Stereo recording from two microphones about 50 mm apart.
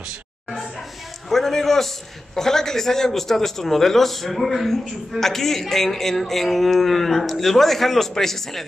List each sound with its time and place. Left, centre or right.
1.3 s a man's voice: centre